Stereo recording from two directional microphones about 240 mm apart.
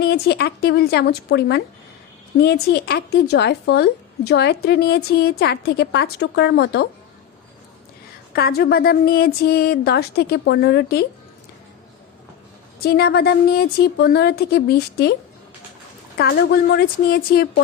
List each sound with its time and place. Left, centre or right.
0.0 s speech: left
8.3 s speech: left
12.8 s speech: left
16.1 s speech: left